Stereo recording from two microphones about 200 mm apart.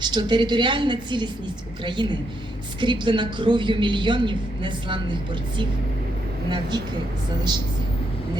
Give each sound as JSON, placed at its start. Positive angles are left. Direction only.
{"t": 0.0, "sound": "a woman's voice", "side_deg": -20}
{"t": 6.5, "sound": "a woman's voice", "side_deg": -20}